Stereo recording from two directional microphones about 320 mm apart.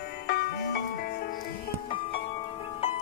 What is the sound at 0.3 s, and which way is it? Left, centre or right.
Music, left.